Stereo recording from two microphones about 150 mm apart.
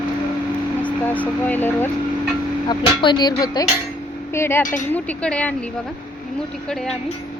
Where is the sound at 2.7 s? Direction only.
30° left (ahead or behind).